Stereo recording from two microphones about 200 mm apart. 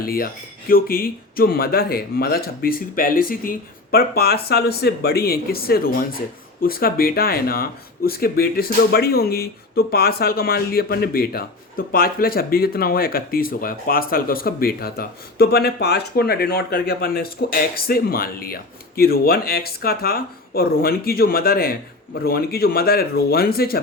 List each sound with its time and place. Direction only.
0.0 s speech: 45° left (ahead or behind)